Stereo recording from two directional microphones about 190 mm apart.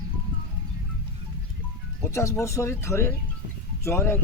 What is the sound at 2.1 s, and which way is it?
Speech, 15° left (ahead or behind).